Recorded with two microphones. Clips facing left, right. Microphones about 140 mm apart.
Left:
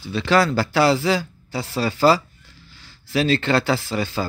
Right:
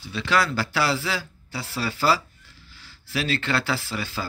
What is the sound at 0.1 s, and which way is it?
Speech, 30° left (ahead or behind).